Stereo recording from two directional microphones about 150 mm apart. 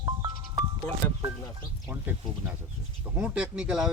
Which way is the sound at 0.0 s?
25° right (ahead or behind).